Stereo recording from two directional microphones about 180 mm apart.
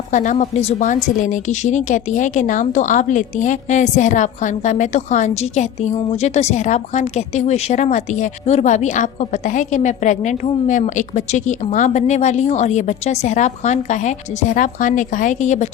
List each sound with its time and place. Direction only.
0.1 s a woman's voice: 45° left (ahead or behind)